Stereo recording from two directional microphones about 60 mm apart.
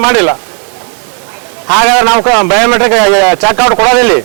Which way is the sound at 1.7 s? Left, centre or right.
Centre.